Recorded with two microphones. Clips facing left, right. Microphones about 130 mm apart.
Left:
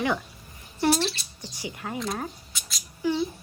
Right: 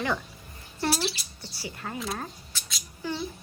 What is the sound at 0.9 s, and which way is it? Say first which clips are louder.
Speech: left 4 dB; 5° right (ahead or behind).